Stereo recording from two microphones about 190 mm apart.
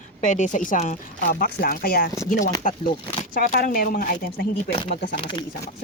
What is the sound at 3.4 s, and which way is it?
A woman's voice, 45° left (ahead or behind).